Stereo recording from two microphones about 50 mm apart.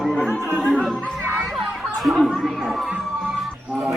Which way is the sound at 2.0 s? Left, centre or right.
Centre.